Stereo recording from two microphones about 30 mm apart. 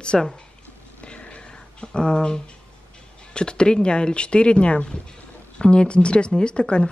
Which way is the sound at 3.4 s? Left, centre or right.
Left.